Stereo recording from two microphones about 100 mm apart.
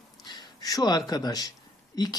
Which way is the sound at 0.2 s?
45° left (ahead or behind).